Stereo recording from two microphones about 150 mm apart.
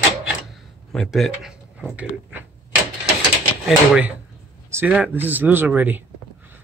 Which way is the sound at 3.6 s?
5° right (ahead or behind).